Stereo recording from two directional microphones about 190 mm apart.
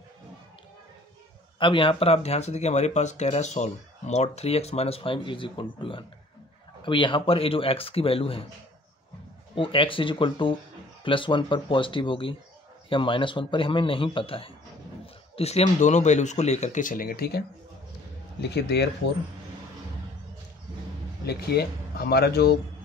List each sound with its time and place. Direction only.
1.6 s a man's voice: 25° left (ahead or behind)
9.6 s a man's voice: 30° left (ahead or behind); by 17.4 s 55° left (ahead or behind)
18.4 s speech: 60° left (ahead or behind)
21.3 s speech: 55° left (ahead or behind)